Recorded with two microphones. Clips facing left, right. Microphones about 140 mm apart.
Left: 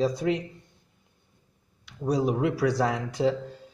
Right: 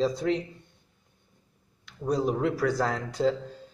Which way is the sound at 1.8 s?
5° left (ahead or behind).